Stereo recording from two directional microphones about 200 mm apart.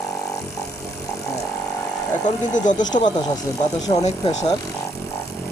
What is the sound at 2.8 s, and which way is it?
Speech, 20° left (ahead or behind).